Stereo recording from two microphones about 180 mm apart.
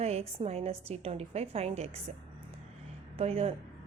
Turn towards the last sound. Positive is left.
turn(degrees=-35)  # may be behind; listen again after turning